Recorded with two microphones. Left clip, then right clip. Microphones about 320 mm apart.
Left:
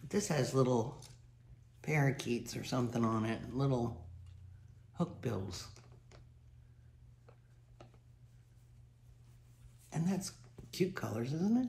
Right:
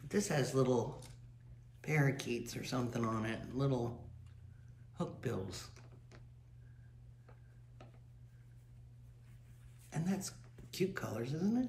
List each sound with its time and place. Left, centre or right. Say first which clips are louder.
0.1 s speech: left 1 dB; centre
4.9 s a man's voice: left 1 dB; centre
9.8 s speech: left 2 dB; centre